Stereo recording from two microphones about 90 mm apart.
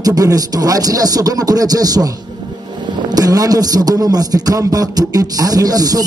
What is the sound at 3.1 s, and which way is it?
A man's voice, 45° right (ahead or behind).